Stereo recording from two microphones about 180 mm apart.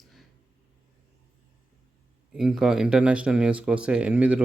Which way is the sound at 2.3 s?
5° right (ahead or behind).